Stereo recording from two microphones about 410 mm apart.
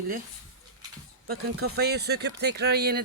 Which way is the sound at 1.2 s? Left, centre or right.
Right.